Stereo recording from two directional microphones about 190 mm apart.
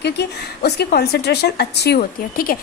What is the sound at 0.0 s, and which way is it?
A woman's voice, 60° left (ahead or behind).